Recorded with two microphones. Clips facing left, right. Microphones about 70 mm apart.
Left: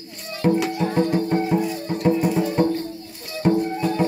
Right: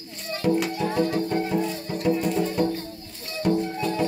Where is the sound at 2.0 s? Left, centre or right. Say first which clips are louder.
Left 3 dB; left.